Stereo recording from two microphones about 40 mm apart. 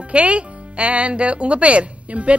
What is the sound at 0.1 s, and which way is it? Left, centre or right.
Speech, right.